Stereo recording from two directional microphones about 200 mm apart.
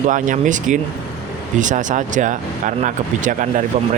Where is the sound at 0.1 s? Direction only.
40° right (ahead or behind).